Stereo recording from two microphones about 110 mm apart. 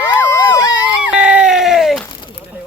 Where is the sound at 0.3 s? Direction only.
40° left (ahead or behind).